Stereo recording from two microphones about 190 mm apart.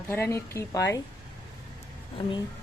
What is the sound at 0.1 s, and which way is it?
Speech, 15° left (ahead or behind).